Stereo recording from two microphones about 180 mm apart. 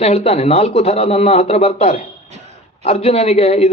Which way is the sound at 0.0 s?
35° left (ahead or behind).